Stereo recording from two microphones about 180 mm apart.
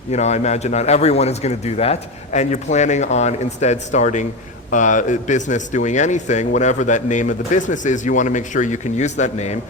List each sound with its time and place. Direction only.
0.1 s a man's voice: 40° left (ahead or behind)